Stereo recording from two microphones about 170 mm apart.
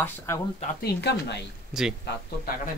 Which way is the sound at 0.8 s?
80° left.